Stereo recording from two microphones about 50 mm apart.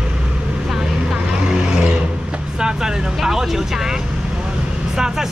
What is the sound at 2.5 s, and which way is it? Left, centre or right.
Speech, centre.